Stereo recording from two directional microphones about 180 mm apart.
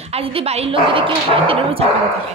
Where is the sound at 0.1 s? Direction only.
30° right (ahead or behind).